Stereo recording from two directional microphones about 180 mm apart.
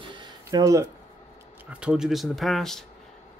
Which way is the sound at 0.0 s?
25° right (ahead or behind).